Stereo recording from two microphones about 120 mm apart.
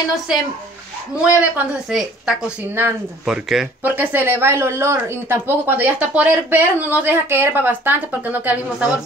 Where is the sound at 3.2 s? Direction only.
5° right (ahead or behind).